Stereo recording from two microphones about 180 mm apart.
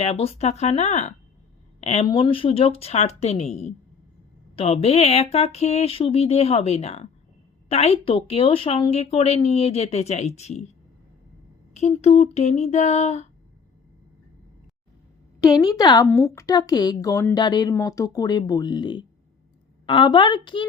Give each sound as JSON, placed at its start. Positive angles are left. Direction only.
{"t": 0.0, "sound": "speech", "side_deg": 35}
{"t": 11.7, "sound": "speech", "side_deg": 35}
{"t": 15.4, "sound": "a woman's voice", "side_deg": 20}